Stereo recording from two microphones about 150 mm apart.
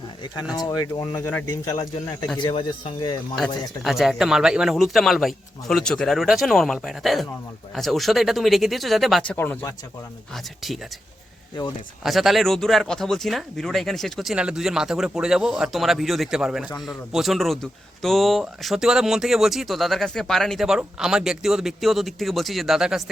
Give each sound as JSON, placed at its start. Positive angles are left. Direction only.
{"t": 0.5, "sound": "speech", "side_deg": 25}
{"t": 1.2, "sound": "speech", "side_deg": 10}
{"t": 2.4, "sound": "speech", "side_deg": 35}
{"t": 3.3, "sound": "speech", "side_deg": 0}
{"t": 10.3, "sound": "speech", "side_deg": 0}
{"t": 12.0, "sound": "speech", "side_deg": 0}